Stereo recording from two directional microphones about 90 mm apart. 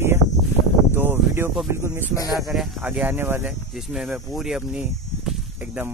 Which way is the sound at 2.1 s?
40° left (ahead or behind).